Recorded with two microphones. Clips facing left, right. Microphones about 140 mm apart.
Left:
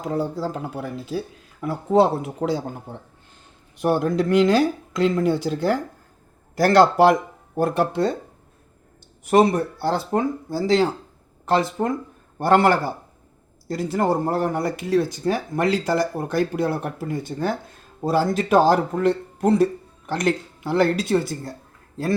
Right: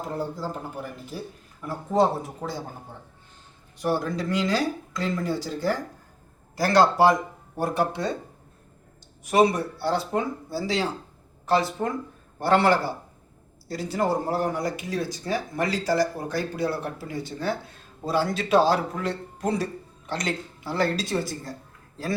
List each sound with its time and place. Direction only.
0.0 s speech: 90° left
1.6 s speech: 75° left (ahead or behind)
3.8 s speech: 60° left (ahead or behind)
9.3 s speech: 50° left (ahead or behind)